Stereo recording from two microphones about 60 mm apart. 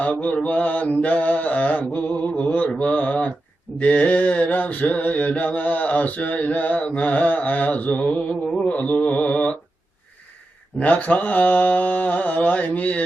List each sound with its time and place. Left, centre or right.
0.0 s mantra: left
10.8 s mantra: left